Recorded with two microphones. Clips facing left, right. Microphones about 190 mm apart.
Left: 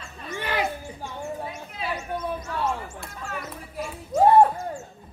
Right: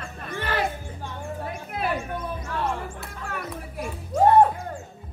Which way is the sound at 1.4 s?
55° right (ahead or behind).